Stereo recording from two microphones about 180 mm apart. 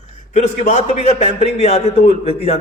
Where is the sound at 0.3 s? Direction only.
40° left (ahead or behind).